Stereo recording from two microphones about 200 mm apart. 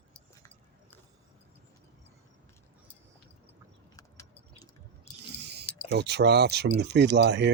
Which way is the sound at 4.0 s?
15° left (ahead or behind).